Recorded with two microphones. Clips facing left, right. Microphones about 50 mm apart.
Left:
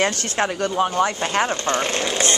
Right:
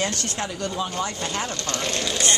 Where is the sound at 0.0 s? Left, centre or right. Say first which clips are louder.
Left 6 dB; left.